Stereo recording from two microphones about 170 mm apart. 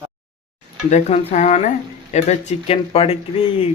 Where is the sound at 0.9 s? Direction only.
40° left (ahead or behind).